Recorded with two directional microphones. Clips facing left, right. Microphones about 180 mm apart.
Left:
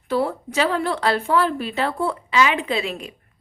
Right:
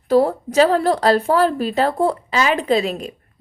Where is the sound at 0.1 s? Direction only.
40° right (ahead or behind).